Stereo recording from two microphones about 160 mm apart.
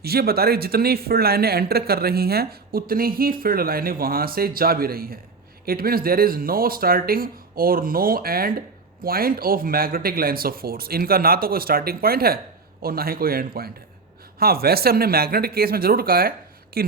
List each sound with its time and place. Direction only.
0.0 s speech: 75° right (ahead or behind)